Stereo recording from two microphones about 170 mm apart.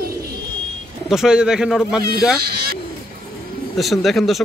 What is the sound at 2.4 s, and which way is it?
Speech, 65° right (ahead or behind).